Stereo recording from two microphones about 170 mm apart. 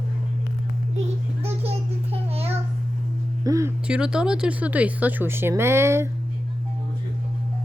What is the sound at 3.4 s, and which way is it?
Speech, 20° right (ahead or behind).